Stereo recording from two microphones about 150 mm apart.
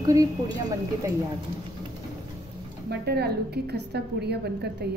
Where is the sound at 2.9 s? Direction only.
90° right.